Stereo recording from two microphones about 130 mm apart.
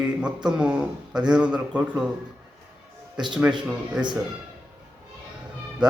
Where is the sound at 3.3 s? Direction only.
5° right (ahead or behind).